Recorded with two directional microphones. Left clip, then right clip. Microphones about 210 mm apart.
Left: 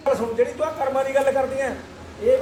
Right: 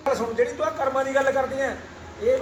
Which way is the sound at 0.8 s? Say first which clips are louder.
Left 1 dB; 10° left (ahead or behind).